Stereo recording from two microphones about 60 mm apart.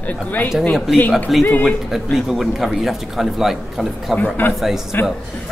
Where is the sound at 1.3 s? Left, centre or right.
Centre.